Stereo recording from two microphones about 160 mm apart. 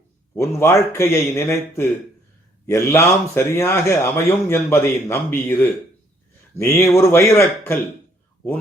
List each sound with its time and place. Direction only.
0.3 s a man's voice: 15° left (ahead or behind)